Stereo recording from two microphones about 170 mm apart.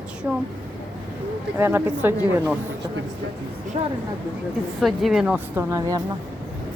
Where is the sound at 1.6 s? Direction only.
15° right (ahead or behind).